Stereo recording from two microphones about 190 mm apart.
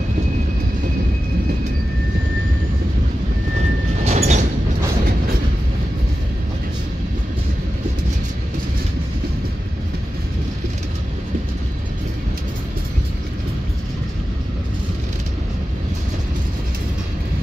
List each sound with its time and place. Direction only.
4.0 s music: 35° right (ahead or behind)